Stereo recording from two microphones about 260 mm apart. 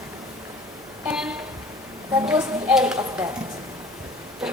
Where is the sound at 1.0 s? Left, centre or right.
Centre.